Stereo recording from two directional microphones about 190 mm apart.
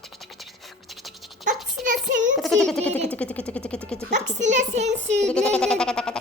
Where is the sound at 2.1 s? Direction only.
75° right (ahead or behind).